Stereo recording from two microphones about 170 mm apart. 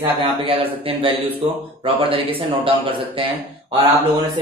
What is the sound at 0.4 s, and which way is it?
Speech, 35° right (ahead or behind).